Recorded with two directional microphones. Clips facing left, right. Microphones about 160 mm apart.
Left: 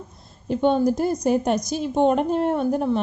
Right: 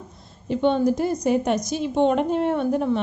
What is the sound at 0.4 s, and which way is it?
A woman's voice, 45° left (ahead or behind).